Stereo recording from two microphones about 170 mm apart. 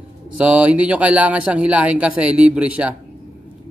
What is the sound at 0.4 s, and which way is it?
Speech, 10° right (ahead or behind).